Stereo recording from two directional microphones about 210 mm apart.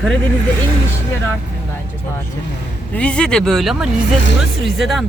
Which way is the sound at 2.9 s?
5° left (ahead or behind).